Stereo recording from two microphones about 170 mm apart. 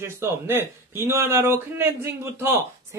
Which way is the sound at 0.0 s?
15° right (ahead or behind).